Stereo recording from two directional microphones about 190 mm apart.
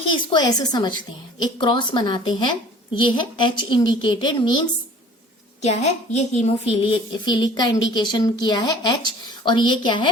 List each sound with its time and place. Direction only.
0.1 s a woman's voice: 25° left (ahead or behind)
5.6 s a woman's voice: 35° left (ahead or behind)